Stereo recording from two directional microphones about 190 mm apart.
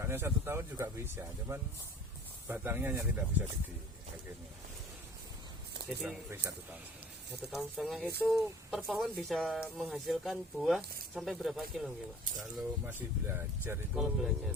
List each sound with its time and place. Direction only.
0.0 s speech: 15° right (ahead or behind)
6.0 s speech: 10° right (ahead or behind)
13.9 s speech: centre (ahead or behind)